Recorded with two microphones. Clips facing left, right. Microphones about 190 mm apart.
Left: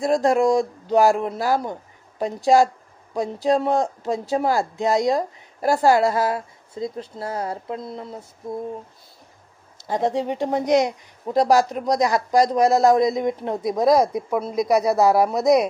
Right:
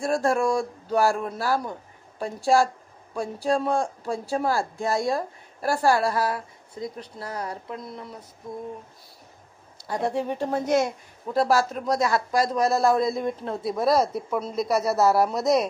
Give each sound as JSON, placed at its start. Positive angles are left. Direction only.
{"t": 0.0, "sound": "speech", "side_deg": 20}
{"t": 9.8, "sound": "speech", "side_deg": 20}